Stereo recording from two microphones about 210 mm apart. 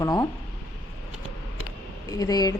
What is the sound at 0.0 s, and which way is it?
Speech, 15° left (ahead or behind).